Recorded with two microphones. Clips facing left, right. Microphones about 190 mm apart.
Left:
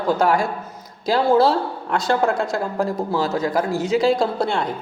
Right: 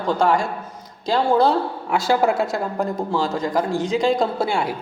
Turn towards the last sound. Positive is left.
turn(degrees=-10)  # may be behind; listen again after turning